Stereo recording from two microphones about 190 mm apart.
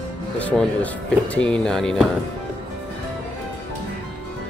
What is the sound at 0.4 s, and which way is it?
Speech, 5° left (ahead or behind).